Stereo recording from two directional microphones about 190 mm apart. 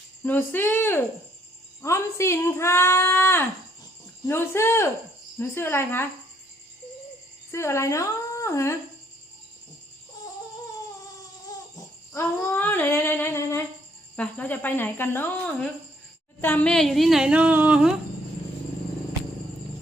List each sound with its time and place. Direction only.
0.2 s speech: 10° left (ahead or behind)
7.5 s speech: 15° left (ahead or behind)
11.0 s a sound: 20° left (ahead or behind)
14.2 s a woman's voice: 10° left (ahead or behind)